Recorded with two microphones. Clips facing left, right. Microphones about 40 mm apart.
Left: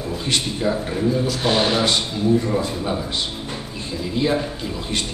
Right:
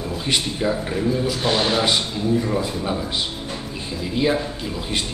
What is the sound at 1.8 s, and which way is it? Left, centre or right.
A man's voice, centre.